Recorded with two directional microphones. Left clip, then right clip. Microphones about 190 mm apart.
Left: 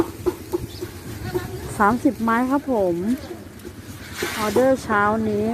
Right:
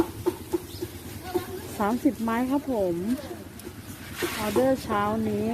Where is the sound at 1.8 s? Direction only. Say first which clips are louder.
Left 7 dB; centre (ahead or behind).